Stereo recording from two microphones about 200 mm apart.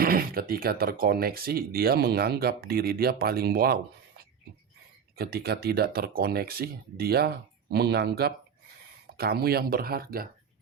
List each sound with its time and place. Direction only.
0.0 s speech: 45° right (ahead or behind)
5.1 s speech: 50° right (ahead or behind)